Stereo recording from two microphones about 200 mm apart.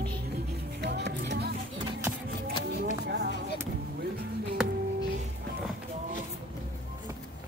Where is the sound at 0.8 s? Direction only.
55° right (ahead or behind).